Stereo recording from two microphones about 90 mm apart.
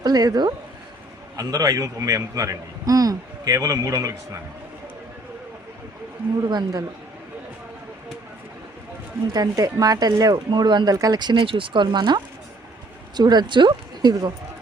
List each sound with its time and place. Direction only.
0.0 s a man's voice: 45° right (ahead or behind)
6.4 s speech: 50° right (ahead or behind)
9.3 s speech: 40° right (ahead or behind)
10.3 s speech: 55° right (ahead or behind)
10.9 s a man's voice: 40° right (ahead or behind)
11.2 s speech: 60° right (ahead or behind)